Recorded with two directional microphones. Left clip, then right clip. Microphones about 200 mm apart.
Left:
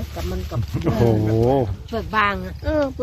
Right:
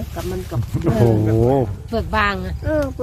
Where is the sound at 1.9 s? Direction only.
15° right (ahead or behind).